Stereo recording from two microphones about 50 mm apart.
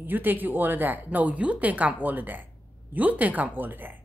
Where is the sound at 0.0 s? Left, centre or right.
Right.